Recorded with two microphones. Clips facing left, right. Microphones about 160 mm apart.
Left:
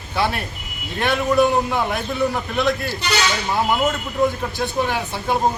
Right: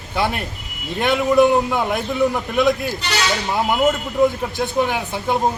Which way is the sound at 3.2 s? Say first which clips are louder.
Right 2 dB; centre (ahead or behind).